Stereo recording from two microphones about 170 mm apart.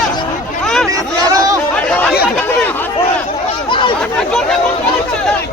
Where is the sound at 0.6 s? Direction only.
5° left (ahead or behind).